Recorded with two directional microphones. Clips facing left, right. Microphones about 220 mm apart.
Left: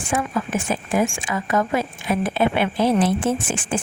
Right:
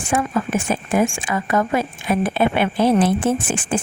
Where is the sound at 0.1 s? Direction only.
50° right (ahead or behind).